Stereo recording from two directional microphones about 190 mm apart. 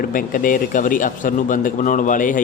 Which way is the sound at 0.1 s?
45° left (ahead or behind).